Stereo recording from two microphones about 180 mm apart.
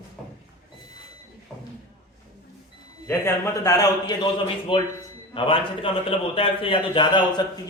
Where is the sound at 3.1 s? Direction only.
15° left (ahead or behind).